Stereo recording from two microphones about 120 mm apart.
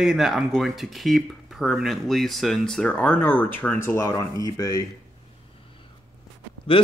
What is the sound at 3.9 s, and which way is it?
Speech, 25° left (ahead or behind).